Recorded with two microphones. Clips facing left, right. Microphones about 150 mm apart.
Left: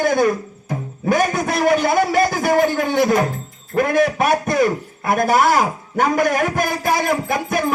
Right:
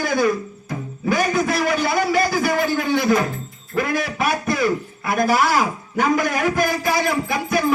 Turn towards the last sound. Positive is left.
turn(degrees=50)  # may be behind; listen again after turning